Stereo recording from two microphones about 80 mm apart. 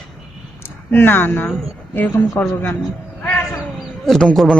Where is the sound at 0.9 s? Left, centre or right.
Left.